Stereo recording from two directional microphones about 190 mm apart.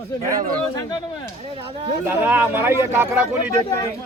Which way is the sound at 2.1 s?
10° right (ahead or behind).